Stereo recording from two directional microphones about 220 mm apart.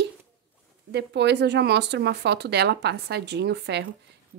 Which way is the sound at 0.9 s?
50° right (ahead or behind).